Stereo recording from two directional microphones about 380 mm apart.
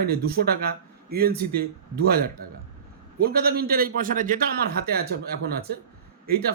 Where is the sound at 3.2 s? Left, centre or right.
Right.